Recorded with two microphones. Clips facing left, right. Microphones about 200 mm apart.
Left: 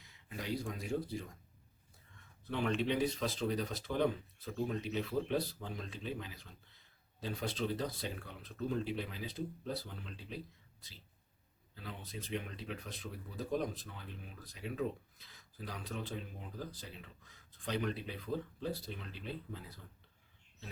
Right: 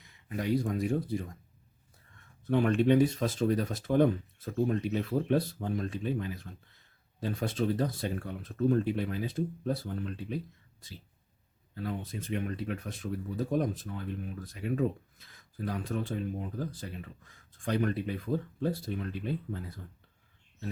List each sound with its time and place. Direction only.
0.0 s speech: 55° right (ahead or behind)
2.5 s speech: 50° right (ahead or behind)
11.7 s speech: 50° right (ahead or behind)